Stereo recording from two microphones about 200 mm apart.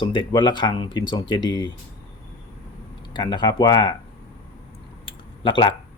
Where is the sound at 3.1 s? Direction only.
20° left (ahead or behind).